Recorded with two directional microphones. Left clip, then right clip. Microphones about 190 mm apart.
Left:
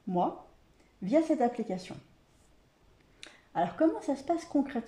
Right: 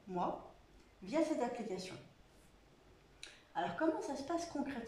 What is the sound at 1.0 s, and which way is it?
Speech, 45° left (ahead or behind).